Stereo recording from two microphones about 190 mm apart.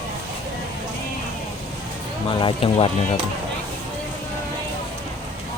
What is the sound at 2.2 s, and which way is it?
Speech, 30° left (ahead or behind).